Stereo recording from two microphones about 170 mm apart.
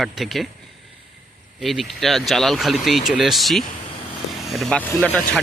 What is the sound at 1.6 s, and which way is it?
Speech, centre (ahead or behind).